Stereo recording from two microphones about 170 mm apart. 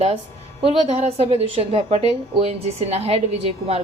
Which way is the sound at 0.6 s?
35° right (ahead or behind).